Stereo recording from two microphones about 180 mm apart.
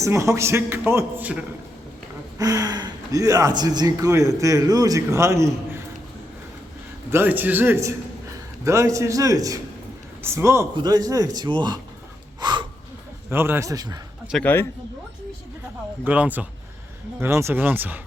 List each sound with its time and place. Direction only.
0.0 s a man's voice: 15° right (ahead or behind)
2.4 s a man's voice: 20° right (ahead or behind)
7.1 s a man's voice: 10° right (ahead or behind)
12.4 s a sound: 25° right (ahead or behind)
13.3 s a man's voice: 15° right (ahead or behind)
14.3 s speech: centre (ahead or behind)
16.0 s a man's voice: 10° right (ahead or behind)